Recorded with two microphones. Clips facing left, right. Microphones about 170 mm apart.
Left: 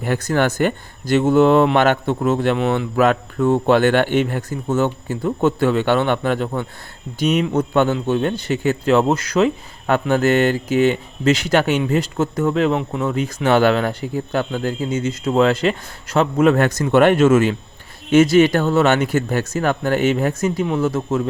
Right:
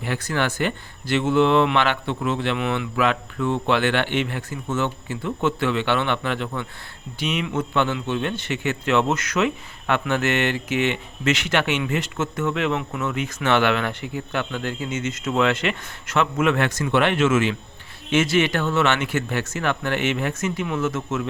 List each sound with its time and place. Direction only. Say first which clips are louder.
0.0 s a man's voice: left 6 dB; 45° left (ahead or behind)